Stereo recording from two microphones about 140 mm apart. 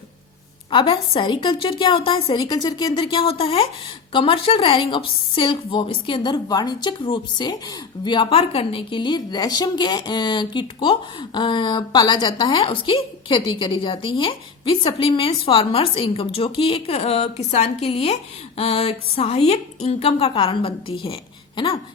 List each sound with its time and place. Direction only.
0.7 s a woman's voice: 35° left (ahead or behind)
2.3 s a woman's voice: 30° left (ahead or behind)